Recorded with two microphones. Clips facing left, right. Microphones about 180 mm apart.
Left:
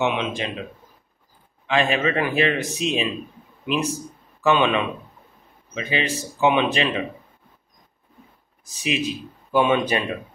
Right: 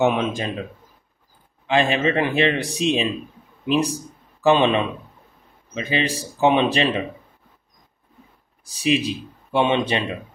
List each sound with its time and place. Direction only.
0.0 s speech: 45° right (ahead or behind)
1.7 s a man's voice: 30° right (ahead or behind)
8.6 s a man's voice: 35° right (ahead or behind)